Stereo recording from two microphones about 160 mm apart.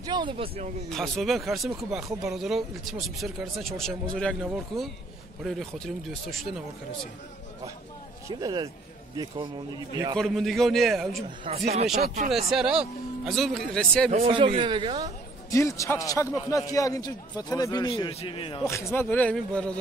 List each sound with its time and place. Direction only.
0.0 s speech: 30° right (ahead or behind)
0.8 s speech: centre (ahead or behind)
5.4 s speech: centre (ahead or behind)
8.3 s speech: 25° right (ahead or behind)
10.1 s speech: centre (ahead or behind)
11.2 s speech: 35° right (ahead or behind)
12.3 s speech: centre (ahead or behind)
14.2 s speech: 35° right (ahead or behind)
15.5 s a man's voice: 20° left (ahead or behind); by 18.6 s 35° left (ahead or behind)
18.6 s speech: 20° left (ahead or behind)